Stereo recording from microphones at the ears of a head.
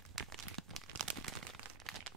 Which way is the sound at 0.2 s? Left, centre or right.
Right.